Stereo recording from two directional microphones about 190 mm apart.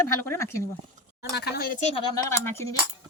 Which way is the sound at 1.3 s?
60° left (ahead or behind).